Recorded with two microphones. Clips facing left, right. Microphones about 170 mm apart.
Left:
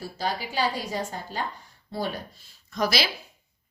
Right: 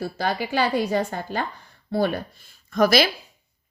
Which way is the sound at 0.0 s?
65° right (ahead or behind).